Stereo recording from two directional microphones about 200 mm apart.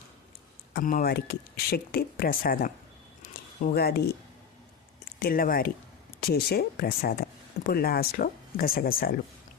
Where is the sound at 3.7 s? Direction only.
50° left (ahead or behind).